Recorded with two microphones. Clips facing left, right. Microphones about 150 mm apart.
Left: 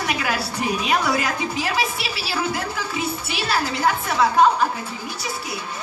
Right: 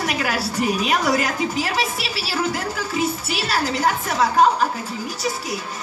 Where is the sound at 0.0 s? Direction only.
45° right (ahead or behind).